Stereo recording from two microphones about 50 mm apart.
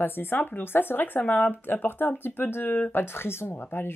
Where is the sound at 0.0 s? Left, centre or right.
Left.